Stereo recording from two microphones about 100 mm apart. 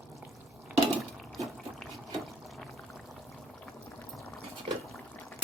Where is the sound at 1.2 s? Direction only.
Centre (ahead or behind).